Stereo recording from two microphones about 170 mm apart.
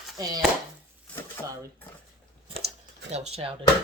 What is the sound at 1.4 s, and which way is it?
Speech, 15° left (ahead or behind).